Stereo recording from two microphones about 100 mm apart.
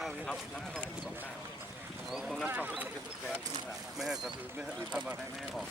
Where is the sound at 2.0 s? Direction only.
5° right (ahead or behind).